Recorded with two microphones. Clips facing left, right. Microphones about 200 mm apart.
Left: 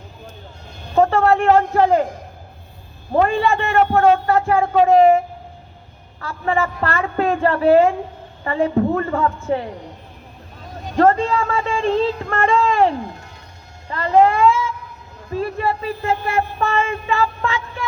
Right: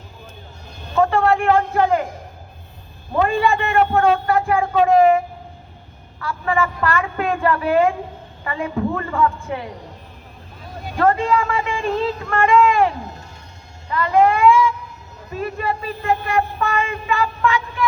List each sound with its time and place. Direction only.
0.9 s speech: 35° left (ahead or behind)
3.2 s speech: 35° left (ahead or behind)
10.9 s speech: 35° left (ahead or behind)
13.9 s speech: 35° left (ahead or behind)
16.2 s a sound: 35° left (ahead or behind)